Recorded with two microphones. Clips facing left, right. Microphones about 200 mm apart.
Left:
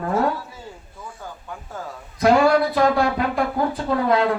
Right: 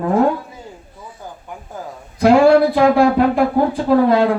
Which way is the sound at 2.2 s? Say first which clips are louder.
Right 6 dB; 30° right (ahead or behind).